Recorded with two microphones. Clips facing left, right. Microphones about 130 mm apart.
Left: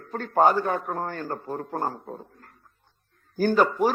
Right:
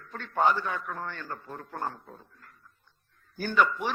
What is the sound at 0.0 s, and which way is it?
A man's voice, 40° left (ahead or behind).